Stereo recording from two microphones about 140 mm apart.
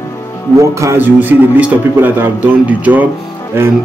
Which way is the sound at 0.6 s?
20° right (ahead or behind).